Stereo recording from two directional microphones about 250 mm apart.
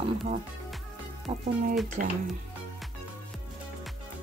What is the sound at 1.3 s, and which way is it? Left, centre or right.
Speech, right.